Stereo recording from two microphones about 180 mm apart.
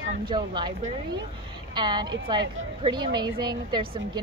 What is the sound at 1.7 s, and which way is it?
A woman's voice, 25° right (ahead or behind).